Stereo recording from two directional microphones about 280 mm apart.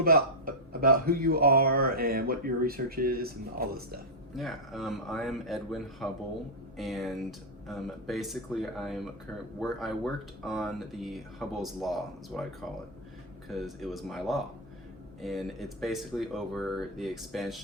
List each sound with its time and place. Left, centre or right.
0.0 s speech: right
4.4 s speech: centre